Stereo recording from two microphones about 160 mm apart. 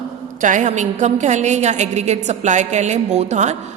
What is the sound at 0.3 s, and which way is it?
A woman's voice, 55° right (ahead or behind).